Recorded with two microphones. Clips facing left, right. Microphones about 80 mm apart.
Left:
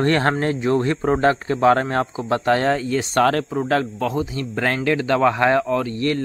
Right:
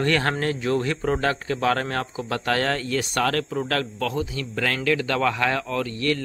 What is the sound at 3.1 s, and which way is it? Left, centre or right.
A man's voice, left.